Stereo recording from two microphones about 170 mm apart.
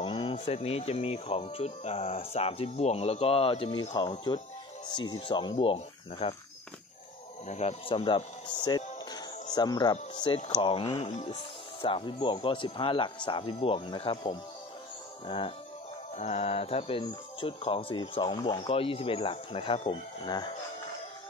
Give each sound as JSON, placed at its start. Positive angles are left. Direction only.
{"t": 0.0, "sound": "speech", "side_deg": 30}
{"t": 7.4, "sound": "speech", "side_deg": 40}